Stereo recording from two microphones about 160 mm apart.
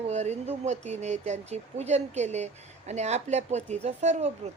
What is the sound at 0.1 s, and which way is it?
A woman's voice, 45° right (ahead or behind).